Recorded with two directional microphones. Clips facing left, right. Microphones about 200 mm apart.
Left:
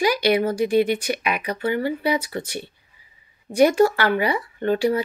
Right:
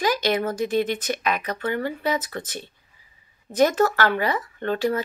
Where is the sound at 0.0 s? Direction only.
10° left (ahead or behind).